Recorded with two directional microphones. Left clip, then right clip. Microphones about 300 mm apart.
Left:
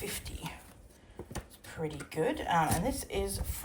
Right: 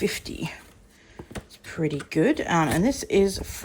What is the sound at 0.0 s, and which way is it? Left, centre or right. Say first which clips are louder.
Speech: right 13 dB; centre.